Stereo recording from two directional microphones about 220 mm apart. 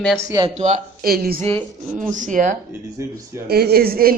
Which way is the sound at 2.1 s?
35° right (ahead or behind).